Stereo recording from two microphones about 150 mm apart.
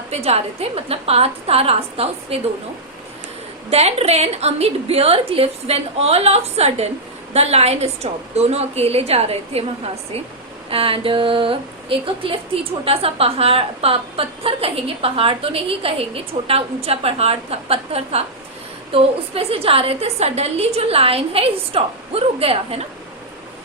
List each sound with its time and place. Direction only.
0.1 s a woman's voice: 45° right (ahead or behind)
3.7 s a woman's voice: 45° right (ahead or behind)